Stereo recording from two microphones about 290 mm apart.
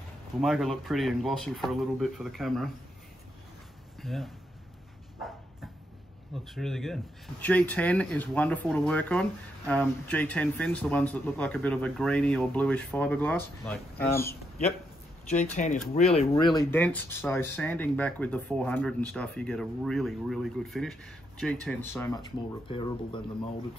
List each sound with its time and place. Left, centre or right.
0.4 s speech: centre
4.0 s speech: centre
6.3 s speech: centre
15.3 s speech: left
16.4 s speech: centre